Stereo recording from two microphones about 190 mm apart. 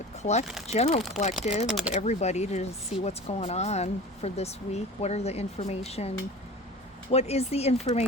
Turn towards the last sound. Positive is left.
turn(degrees=35)  # may be behind; listen again after turning